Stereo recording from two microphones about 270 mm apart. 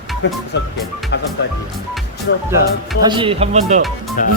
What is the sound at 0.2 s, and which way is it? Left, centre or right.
Music, left.